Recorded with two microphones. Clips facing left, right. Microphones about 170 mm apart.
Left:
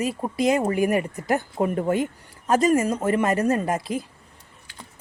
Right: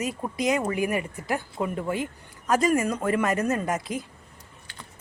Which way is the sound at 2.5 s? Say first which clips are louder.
Left 3 dB; 25° left (ahead or behind).